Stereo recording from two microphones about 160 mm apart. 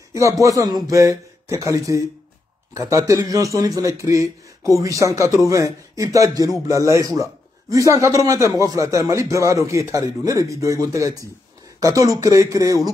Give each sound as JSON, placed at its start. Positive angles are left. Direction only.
{"t": 0.1, "sound": "a man's voice", "side_deg": -20}